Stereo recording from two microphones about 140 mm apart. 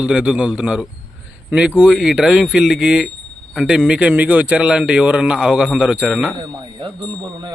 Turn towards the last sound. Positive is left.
turn(degrees=-35)  # may be behind; listen again after turning